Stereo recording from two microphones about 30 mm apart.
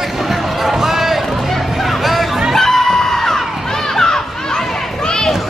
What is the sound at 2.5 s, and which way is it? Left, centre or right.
Crowd, centre.